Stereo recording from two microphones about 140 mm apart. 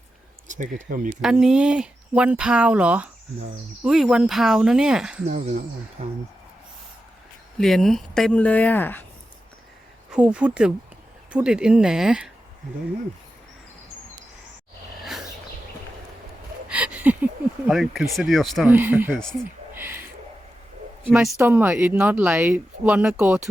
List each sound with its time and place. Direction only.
0.4 s speech: 65° right (ahead or behind)
1.2 s speech: 5° right (ahead or behind)
5.3 s speech: 55° right (ahead or behind)
7.6 s speech: centre (ahead or behind)
10.1 s speech: 10° right (ahead or behind)
16.6 s a sound: 10° right (ahead or behind)
17.7 s speech: centre (ahead or behind)
18.6 s speech: 10° right (ahead or behind)
19.7 s a sound: 15° right (ahead or behind)
21.1 s speech: 5° right (ahead or behind)